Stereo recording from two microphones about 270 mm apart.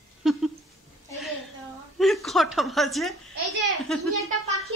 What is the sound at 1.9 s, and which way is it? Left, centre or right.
A woman's voice, centre.